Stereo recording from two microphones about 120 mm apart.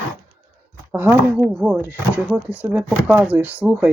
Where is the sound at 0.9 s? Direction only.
15° right (ahead or behind).